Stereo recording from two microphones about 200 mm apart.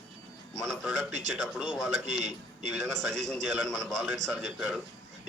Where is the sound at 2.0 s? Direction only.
35° right (ahead or behind).